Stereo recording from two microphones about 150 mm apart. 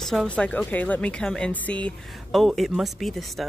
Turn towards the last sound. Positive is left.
turn(degrees=0)  # may be behind; listen again after turning